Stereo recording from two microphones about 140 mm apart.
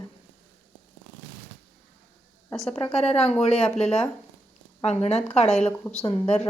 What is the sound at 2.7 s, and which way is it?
A woman's voice, 45° left (ahead or behind).